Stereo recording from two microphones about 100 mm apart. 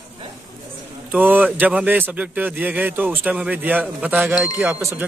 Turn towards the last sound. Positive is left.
turn(degrees=-25)  # may be behind; listen again after turning